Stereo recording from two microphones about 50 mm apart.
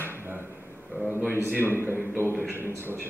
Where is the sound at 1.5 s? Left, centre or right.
Right.